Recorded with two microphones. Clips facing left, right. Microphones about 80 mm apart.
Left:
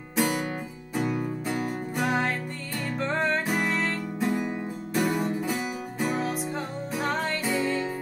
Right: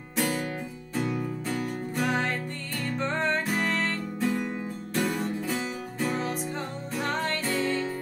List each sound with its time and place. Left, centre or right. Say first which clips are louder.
0.1 s music: left 2 dB; centre